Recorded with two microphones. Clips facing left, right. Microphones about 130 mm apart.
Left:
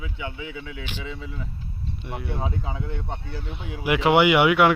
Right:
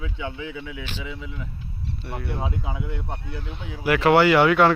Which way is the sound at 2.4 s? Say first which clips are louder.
Even; 10° right (ahead or behind).